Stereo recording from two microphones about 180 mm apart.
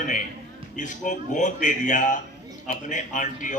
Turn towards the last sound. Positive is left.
turn(degrees=45)  # may be behind; listen again after turning